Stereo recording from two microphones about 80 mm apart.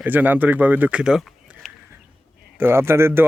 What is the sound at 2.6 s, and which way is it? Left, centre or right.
Speech, right.